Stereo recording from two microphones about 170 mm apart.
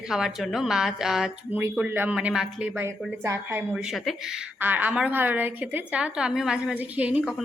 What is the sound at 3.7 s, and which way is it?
A woman's voice, centre (ahead or behind).